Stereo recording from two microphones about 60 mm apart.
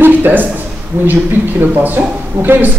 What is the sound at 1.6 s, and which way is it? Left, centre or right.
A man's voice, right.